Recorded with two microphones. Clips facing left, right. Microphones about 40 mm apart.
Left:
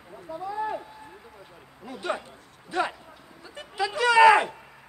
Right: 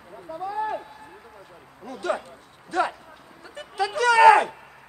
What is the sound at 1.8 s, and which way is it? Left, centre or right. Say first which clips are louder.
Speech: right 3 dB; centre.